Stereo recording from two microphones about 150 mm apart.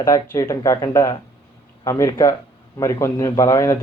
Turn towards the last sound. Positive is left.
turn(degrees=20)  # may be behind; listen again after turning